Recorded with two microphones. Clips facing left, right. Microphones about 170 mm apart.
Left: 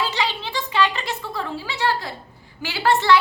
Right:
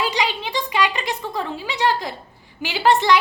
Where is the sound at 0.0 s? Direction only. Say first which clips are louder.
Right 2 dB; 15° right (ahead or behind).